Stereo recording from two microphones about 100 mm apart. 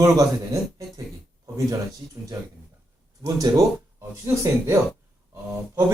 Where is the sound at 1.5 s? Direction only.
35° right (ahead or behind).